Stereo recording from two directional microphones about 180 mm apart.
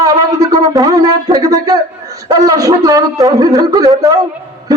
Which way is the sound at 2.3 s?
20° right (ahead or behind).